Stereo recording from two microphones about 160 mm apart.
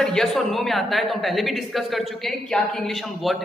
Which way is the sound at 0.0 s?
5° left (ahead or behind).